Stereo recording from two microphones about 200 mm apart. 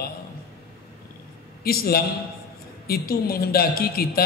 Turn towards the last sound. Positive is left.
turn(degrees=50)  # may be behind; listen again after turning